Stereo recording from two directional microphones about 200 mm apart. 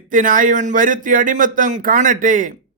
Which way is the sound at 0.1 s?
40° right (ahead or behind).